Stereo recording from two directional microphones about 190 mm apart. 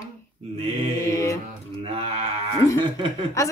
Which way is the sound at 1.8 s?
30° right (ahead or behind).